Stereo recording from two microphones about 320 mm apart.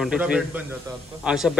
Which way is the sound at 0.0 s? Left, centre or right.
Centre.